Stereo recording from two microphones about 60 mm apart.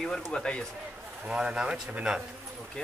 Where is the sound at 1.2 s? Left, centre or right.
Centre.